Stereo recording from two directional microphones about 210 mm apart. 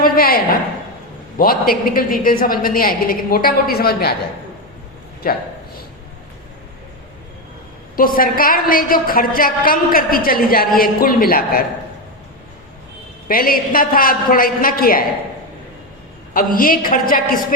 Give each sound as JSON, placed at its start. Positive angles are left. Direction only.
{"t": 0.0, "sound": "a woman's voice", "side_deg": 45}
{"t": 5.2, "sound": "a sound", "side_deg": 45}
{"t": 7.9, "sound": "a woman's voice", "side_deg": 40}
{"t": 13.2, "sound": "a woman's voice", "side_deg": 45}
{"t": 16.3, "sound": "a woman's voice", "side_deg": 40}